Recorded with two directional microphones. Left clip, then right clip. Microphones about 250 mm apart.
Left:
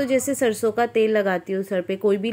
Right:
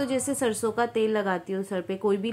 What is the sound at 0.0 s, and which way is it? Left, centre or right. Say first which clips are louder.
A woman's voice: left 6 dB; centre.